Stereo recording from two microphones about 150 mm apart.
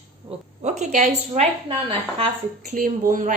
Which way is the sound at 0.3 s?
50° right (ahead or behind).